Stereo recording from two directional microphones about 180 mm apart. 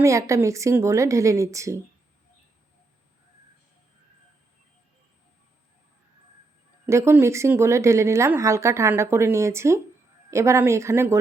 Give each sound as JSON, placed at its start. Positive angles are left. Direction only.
{"t": 0.0, "sound": "speech", "side_deg": -15}
{"t": 6.8, "sound": "speech", "side_deg": -15}